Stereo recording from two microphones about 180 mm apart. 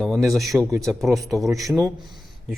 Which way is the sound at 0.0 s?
Centre (ahead or behind).